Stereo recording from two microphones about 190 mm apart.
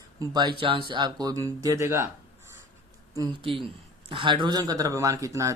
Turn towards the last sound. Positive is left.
turn(degrees=-15)  # may be behind; listen again after turning